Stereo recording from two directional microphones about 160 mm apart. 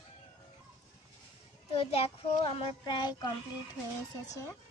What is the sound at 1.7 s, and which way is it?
A child's voice, 40° left (ahead or behind).